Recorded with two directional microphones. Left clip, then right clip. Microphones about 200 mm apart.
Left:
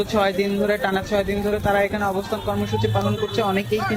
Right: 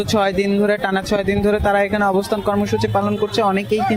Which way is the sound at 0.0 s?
40° right (ahead or behind).